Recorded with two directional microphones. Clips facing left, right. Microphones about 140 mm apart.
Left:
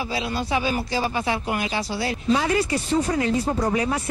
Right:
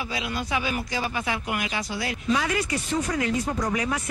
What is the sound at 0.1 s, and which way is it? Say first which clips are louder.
Speech: left 4 dB; 30° left (ahead or behind).